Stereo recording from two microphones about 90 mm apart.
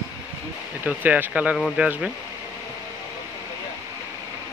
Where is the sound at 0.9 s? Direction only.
20° right (ahead or behind).